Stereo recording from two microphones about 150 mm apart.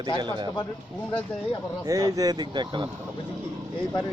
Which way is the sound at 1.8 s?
20° right (ahead or behind).